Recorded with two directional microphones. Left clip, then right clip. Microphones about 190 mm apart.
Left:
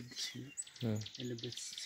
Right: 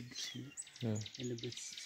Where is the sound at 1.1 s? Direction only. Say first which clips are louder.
Even; 30° right (ahead or behind).